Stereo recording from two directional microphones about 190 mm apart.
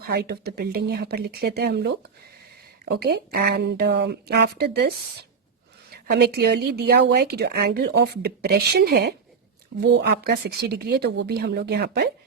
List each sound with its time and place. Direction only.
0.0 s a woman's voice: 55° right (ahead or behind)
5.9 s a woman's voice: 55° right (ahead or behind)